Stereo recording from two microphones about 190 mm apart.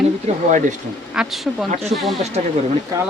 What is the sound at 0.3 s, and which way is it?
Speech, 35° right (ahead or behind).